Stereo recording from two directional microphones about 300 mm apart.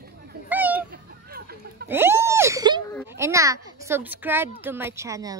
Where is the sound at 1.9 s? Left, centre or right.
Centre.